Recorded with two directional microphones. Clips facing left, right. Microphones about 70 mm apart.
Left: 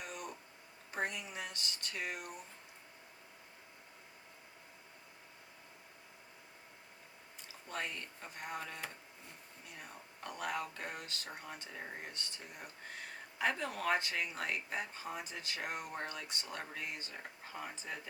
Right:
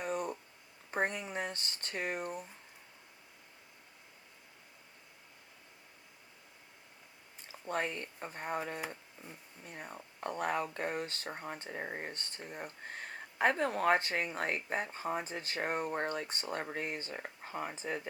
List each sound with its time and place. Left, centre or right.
0.0 s a sound: right
0.9 s speech: right
7.7 s speech: right